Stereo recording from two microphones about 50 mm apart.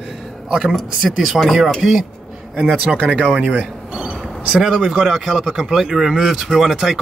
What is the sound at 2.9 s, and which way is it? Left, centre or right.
Speech, right.